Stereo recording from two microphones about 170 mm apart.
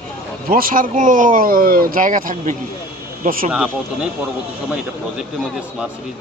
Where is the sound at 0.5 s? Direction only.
55° right (ahead or behind).